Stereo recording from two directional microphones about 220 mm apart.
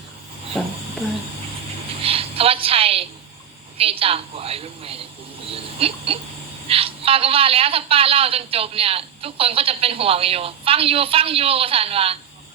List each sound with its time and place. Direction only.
2.0 s music: 25° right (ahead or behind)
3.8 s a woman's voice: 25° right (ahead or behind)